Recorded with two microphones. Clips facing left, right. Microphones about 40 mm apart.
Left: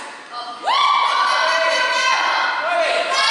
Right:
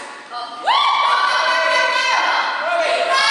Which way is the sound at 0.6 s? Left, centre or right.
Right.